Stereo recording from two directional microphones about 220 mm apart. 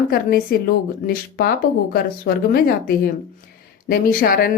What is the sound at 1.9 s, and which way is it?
A woman's voice, 45° left (ahead or behind).